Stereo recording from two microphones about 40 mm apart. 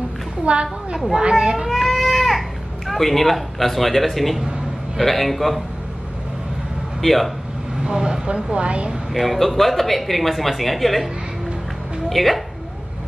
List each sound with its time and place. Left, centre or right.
0.5 s a woman's voice: right
1.4 s a woman's voice: right
1.7 s baby cry: centre
2.9 s speech: centre
7.0 s speech: centre
7.8 s a woman's voice: centre
9.1 s speech: centre
12.1 s speech: centre